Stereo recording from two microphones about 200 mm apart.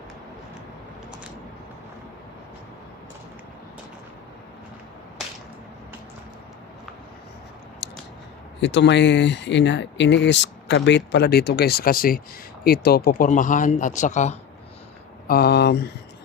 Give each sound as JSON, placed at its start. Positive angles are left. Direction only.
{"t": 7.8, "sound": "a sound", "side_deg": 60}
{"t": 8.6, "sound": "speech", "side_deg": 60}
{"t": 15.3, "sound": "speech", "side_deg": 55}